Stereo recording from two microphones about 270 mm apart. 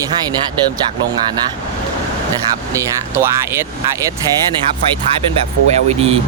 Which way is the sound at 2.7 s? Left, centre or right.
Centre.